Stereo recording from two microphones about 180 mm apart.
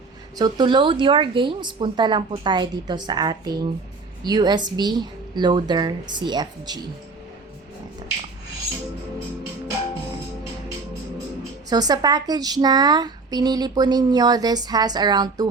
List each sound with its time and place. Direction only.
0.3 s speech: 20° right (ahead or behind)
11.7 s speech: 20° right (ahead or behind)